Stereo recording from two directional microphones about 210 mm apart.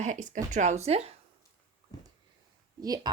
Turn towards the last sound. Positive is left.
turn(degrees=-20)  # may be behind; listen again after turning